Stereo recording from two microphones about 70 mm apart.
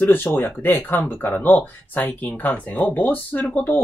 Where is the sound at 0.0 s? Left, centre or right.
Left.